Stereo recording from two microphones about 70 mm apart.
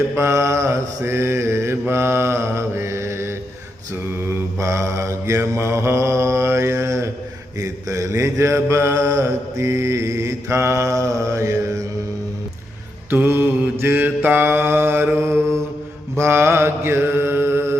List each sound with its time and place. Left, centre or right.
0.2 s mantra: right
4.3 s mantra: right
13.1 s mantra: right